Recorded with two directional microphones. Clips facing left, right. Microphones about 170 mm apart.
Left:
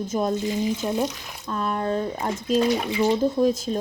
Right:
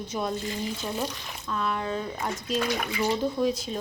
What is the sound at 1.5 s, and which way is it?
Speech, 40° left (ahead or behind).